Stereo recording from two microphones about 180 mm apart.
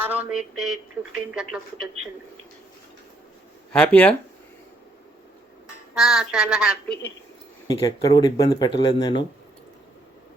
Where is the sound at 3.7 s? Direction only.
5° left (ahead or behind).